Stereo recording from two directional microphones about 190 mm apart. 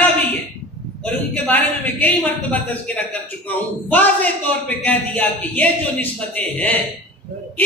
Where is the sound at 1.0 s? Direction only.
10° left (ahead or behind).